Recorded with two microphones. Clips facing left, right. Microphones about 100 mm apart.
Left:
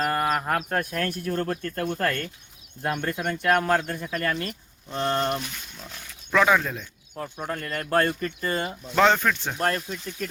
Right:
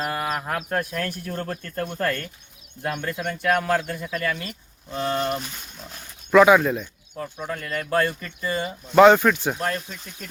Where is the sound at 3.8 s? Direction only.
40° left (ahead or behind).